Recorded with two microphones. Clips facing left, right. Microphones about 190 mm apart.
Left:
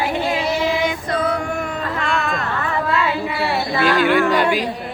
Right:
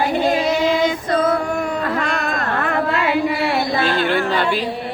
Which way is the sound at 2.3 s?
55° right (ahead or behind).